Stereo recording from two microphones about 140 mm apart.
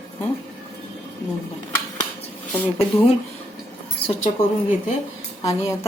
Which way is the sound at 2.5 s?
10° left (ahead or behind).